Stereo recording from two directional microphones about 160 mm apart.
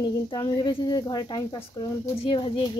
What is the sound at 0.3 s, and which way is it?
Speech, 25° left (ahead or behind).